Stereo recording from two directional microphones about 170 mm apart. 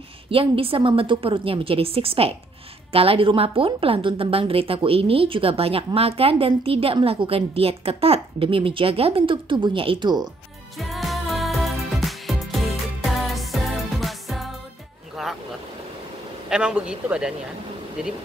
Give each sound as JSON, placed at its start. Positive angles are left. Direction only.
{"t": 0.3, "sound": "a woman's voice", "side_deg": -35}
{"t": 10.8, "sound": "music", "side_deg": 0}
{"t": 15.2, "sound": "vehicle", "side_deg": 0}
{"t": 16.4, "sound": "a man's voice", "side_deg": -5}